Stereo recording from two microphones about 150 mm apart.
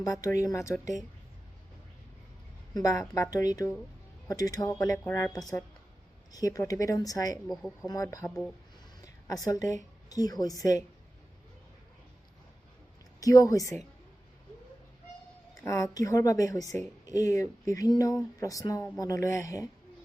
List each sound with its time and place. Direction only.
0.0 s speech: 25° left (ahead or behind)
3.3 s speech: 25° left (ahead or behind)
7.4 s speech: centre (ahead or behind)
8.0 s speech: 20° left (ahead or behind)
8.3 s speech: centre (ahead or behind)
9.0 s a sound: 25° left (ahead or behind)
10.1 s speech: 25° left (ahead or behind)
13.1 s a woman's voice: 25° left (ahead or behind)
15.6 s speech: 20° left (ahead or behind)